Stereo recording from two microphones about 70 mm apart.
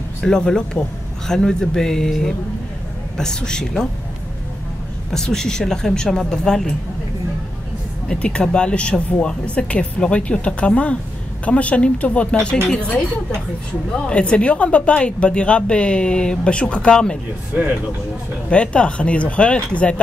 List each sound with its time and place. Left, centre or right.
0.2 s speech: centre
5.1 s speech: centre
8.1 s speech: centre
12.6 s speech: centre
13.9 s speech: centre
18.5 s speech: centre